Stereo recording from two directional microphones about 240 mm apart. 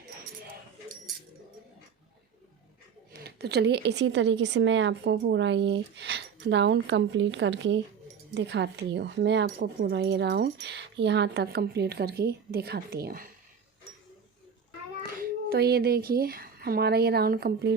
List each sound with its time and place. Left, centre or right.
3.1 s speech: right
15.2 s speech: right